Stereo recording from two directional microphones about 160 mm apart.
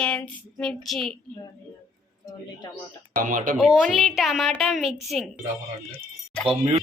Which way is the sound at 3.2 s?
55° right (ahead or behind).